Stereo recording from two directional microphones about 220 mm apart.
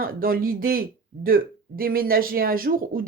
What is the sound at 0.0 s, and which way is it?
Speech, 40° right (ahead or behind).